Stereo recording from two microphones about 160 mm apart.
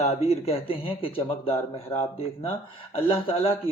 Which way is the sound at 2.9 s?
35° left (ahead or behind).